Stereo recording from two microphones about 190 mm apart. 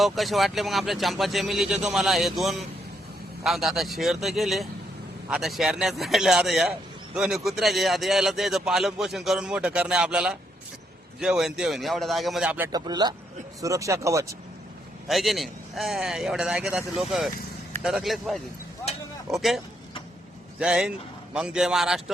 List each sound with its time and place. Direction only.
0.0 s a man's voice: centre (ahead or behind); by 14.3 s 15° right (ahead or behind)
15.0 s a man's voice: centre (ahead or behind)